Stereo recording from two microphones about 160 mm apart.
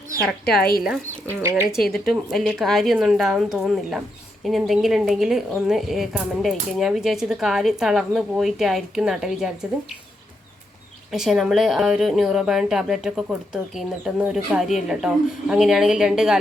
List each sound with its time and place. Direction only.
1.4 s speech: 15° right (ahead or behind)
1.7 s speech: centre (ahead or behind)
11.1 s speech: centre (ahead or behind)